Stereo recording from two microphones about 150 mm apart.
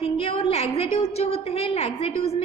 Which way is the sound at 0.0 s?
40° left (ahead or behind).